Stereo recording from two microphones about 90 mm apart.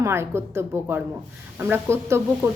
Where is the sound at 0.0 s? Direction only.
30° right (ahead or behind).